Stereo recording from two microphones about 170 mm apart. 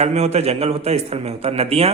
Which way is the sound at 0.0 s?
40° right (ahead or behind).